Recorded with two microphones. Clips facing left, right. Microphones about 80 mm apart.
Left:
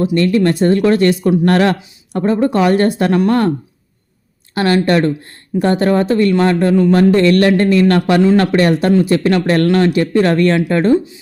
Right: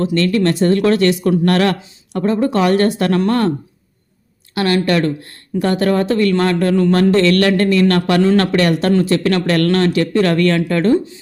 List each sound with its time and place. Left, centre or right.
0.0 s speech: centre
4.5 s speech: left